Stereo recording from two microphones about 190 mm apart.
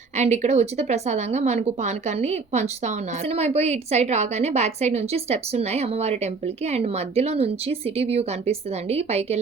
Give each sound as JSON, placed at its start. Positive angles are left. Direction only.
{"t": 0.2, "sound": "speech", "side_deg": -35}